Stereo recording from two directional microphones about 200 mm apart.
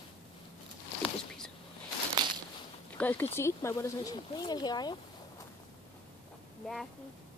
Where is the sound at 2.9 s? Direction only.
10° left (ahead or behind).